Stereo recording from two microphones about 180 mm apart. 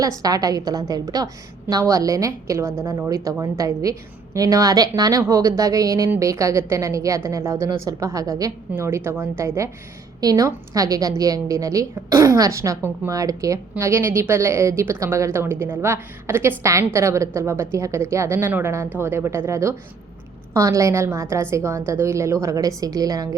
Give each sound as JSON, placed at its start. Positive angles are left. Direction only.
{"t": 0.2, "sound": "a woman's voice", "side_deg": -20}